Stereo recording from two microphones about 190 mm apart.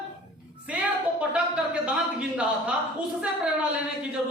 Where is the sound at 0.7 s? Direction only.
5° right (ahead or behind).